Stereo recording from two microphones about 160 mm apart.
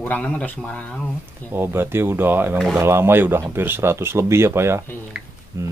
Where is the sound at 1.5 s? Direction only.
15° right (ahead or behind).